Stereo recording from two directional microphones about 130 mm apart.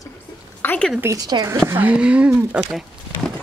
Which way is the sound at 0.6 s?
15° left (ahead or behind).